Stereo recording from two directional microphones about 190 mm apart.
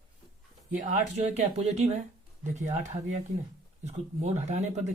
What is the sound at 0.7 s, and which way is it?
Speech, 40° right (ahead or behind).